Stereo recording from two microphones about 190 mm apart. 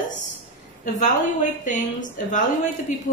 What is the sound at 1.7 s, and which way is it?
Speech, 40° left (ahead or behind).